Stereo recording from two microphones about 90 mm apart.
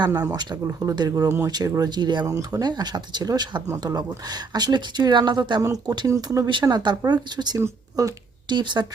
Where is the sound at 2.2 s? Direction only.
40° right (ahead or behind).